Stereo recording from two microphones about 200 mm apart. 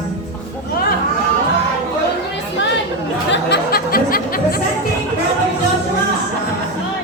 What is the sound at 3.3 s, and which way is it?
Music, 55° left (ahead or behind).